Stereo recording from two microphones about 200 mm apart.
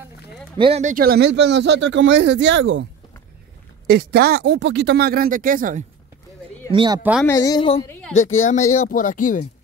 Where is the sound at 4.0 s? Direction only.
55° right (ahead or behind).